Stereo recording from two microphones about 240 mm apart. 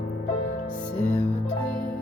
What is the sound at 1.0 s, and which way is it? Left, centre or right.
Music, left.